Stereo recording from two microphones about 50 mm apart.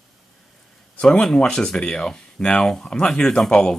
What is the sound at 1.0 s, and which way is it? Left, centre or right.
Speech, centre.